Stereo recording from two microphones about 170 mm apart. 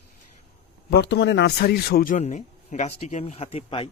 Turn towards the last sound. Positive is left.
turn(degrees=35)  # may be behind; listen again after turning